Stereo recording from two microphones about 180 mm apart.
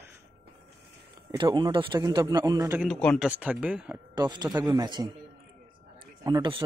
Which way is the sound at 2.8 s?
5° left (ahead or behind).